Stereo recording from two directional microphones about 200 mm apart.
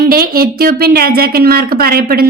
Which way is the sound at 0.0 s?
50° right (ahead or behind).